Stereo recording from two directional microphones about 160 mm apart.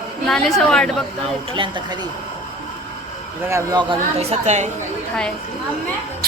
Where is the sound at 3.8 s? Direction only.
35° right (ahead or behind).